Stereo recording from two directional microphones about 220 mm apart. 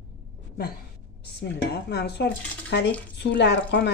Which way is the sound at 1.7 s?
50° left (ahead or behind).